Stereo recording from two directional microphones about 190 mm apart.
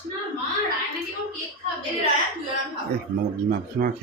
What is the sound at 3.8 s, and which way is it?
Speech, 55° right (ahead or behind).